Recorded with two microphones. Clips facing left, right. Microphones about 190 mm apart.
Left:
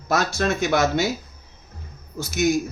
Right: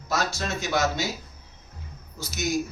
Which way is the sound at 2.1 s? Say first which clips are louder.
Left 9 dB; 55° left (ahead or behind).